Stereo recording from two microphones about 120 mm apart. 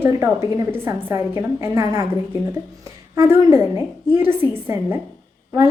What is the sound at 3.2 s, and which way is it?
Speech, 20° right (ahead or behind).